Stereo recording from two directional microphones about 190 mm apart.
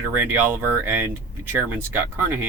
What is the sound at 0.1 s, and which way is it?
Speech, 10° right (ahead or behind).